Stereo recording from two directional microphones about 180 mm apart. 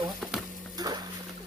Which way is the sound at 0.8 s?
20° right (ahead or behind).